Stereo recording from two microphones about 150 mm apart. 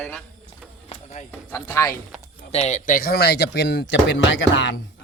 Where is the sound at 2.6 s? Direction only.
60° left (ahead or behind); by 3.5 s 90° left.